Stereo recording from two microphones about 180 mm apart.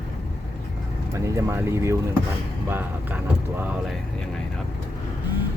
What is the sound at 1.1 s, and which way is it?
Speech, 15° right (ahead or behind).